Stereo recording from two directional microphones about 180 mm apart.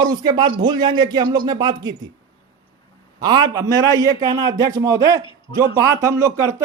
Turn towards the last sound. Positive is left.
turn(degrees=-15)  # may be behind; listen again after turning